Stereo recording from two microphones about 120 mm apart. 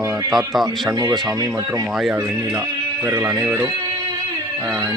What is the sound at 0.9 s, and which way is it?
Speech, 35° right (ahead or behind).